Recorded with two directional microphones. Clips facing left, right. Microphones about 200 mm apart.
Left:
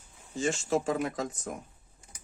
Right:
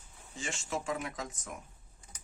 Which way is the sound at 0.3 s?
35° left (ahead or behind).